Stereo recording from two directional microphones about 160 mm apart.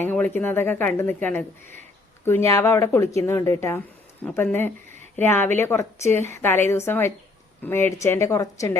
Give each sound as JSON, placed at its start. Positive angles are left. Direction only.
{"t": 0.0, "sound": "a woman's voice", "side_deg": 10}